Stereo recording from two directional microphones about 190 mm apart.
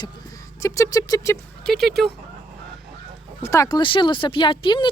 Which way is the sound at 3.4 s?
15° left (ahead or behind).